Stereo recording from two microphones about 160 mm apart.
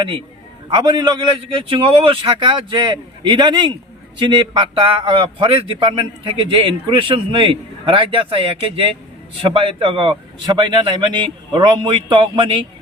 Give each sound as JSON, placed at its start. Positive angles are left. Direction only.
{"t": 0.0, "sound": "speech", "side_deg": -30}